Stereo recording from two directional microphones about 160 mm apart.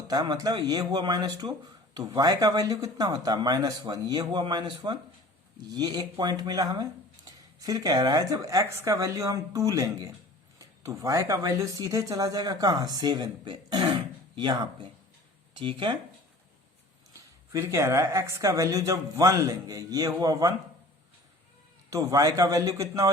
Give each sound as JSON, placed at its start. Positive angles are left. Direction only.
{"t": 0.1, "sound": "speech", "side_deg": -25}
{"t": 17.5, "sound": "speech", "side_deg": -15}
{"t": 21.8, "sound": "speech", "side_deg": -20}